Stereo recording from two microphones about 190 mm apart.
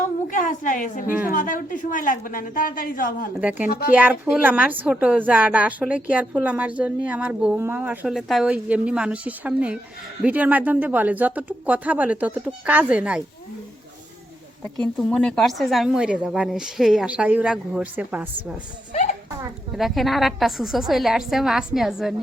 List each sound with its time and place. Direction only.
0.3 s a woman's voice: 45° left (ahead or behind)
3.3 s a woman's voice: 10° right (ahead or behind)
3.7 s a woman's voice: 50° left (ahead or behind)
3.9 s a woman's voice: 10° right (ahead or behind)
14.9 s a woman's voice: 5° left (ahead or behind)
19.7 s a woman's voice: centre (ahead or behind)